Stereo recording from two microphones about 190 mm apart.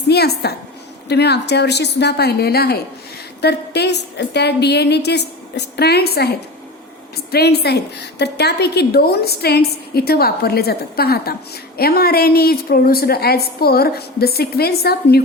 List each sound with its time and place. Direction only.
0.1 s a woman's voice: 55° left (ahead or behind)